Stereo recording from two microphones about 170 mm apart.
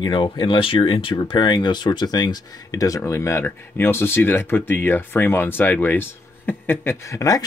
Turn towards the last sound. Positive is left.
turn(degrees=20)  # may be behind; listen again after turning